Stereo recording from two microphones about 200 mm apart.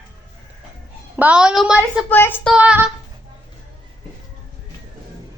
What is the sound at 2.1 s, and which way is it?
Speech, 10° left (ahead or behind).